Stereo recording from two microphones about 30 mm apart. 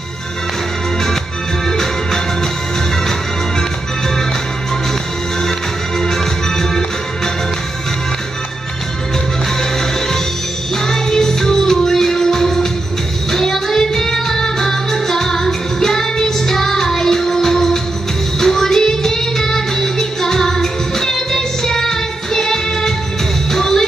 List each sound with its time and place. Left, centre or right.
1.7 s music: centre
5.4 s music: centre
9.6 s music: centre
13.3 s child singing: centre
14.4 s music: centre